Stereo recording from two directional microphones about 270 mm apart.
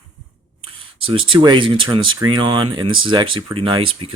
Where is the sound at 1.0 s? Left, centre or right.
Centre.